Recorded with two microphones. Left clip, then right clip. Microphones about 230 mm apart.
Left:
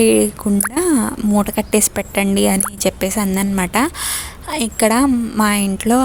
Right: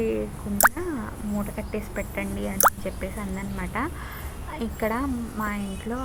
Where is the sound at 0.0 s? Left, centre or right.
Left.